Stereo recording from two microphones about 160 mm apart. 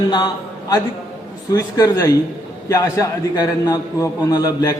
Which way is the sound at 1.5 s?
25° left (ahead or behind).